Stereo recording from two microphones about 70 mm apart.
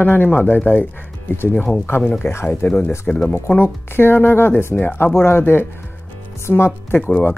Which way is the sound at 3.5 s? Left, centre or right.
Left.